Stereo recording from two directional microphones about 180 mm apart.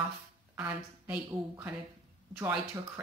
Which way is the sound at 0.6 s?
5° right (ahead or behind).